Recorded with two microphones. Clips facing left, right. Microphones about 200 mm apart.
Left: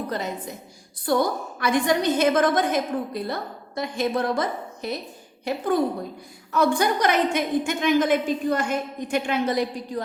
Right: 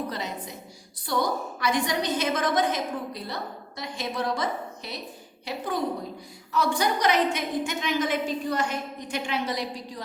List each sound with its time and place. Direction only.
0.1 s a woman's voice: 50° left (ahead or behind)